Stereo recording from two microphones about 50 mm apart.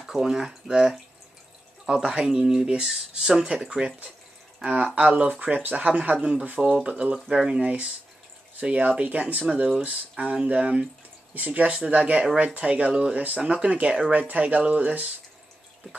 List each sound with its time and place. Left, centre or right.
0.0 s speech: centre
4.6 s speech: right
7.2 s speech: centre
8.5 s speech: right